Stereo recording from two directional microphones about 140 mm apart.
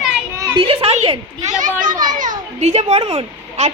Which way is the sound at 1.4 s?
65° right (ahead or behind).